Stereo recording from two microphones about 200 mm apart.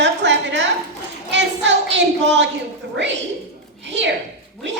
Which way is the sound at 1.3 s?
65° right (ahead or behind).